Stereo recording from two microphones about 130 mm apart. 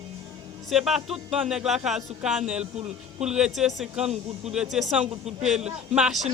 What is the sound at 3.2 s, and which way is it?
Speech, 5° right (ahead or behind).